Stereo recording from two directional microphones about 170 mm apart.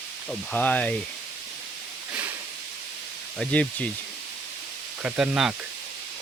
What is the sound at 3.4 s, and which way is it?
Speech, 10° left (ahead or behind).